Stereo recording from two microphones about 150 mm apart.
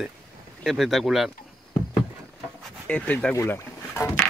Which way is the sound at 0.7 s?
Centre (ahead or behind).